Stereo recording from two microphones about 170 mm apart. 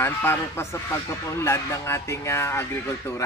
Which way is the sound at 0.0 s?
15° left (ahead or behind).